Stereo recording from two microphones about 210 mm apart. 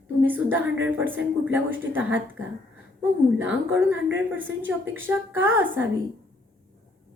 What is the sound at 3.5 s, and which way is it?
A woman's voice, 10° right (ahead or behind).